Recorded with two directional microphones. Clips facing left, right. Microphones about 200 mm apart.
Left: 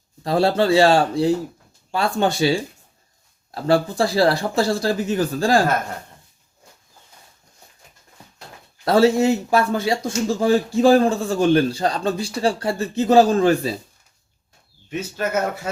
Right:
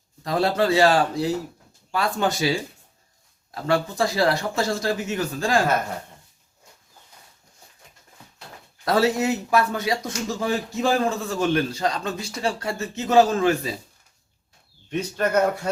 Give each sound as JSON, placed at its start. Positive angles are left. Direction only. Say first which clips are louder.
{"t": 0.2, "sound": "a man's voice", "louder": "left 4 dB", "side_deg": 30}
{"t": 8.8, "sound": "a man's voice", "louder": "left 5 dB", "side_deg": 25}
{"t": 14.8, "sound": "speech", "louder": "right 1 dB", "side_deg": 5}